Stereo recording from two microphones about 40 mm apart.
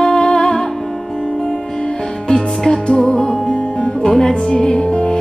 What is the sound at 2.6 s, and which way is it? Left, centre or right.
Music, centre.